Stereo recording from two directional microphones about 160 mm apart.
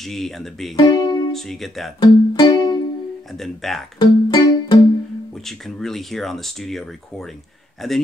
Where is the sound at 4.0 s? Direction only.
25° left (ahead or behind).